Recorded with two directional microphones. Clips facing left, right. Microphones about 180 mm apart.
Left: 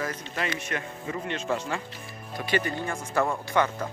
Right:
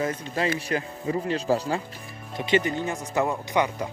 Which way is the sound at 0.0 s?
30° right (ahead or behind).